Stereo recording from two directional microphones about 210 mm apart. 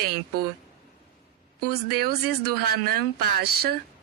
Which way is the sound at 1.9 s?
50° right (ahead or behind).